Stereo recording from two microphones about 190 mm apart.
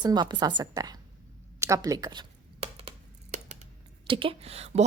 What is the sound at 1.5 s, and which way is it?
Computer keyboard, 15° right (ahead or behind).